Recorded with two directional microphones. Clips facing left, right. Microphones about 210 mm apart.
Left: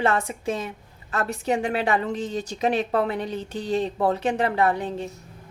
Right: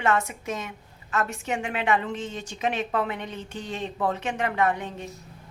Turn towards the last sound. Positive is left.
turn(degrees=35)  # may be behind; listen again after turning